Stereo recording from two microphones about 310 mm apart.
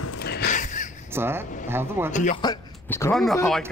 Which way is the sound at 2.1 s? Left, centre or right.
Centre.